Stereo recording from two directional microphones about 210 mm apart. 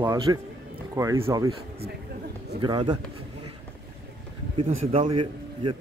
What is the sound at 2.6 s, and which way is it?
Speech, 20° right (ahead or behind).